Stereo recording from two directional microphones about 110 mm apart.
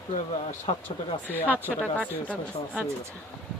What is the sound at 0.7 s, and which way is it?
Speech, 70° left (ahead or behind).